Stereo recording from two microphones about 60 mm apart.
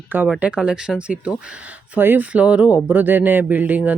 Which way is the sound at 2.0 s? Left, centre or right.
Right.